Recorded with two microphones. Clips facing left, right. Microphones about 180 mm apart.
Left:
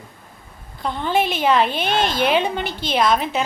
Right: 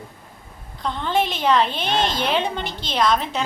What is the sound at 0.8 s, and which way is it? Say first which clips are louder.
A woman's voice: left 2 dB; 10° left (ahead or behind).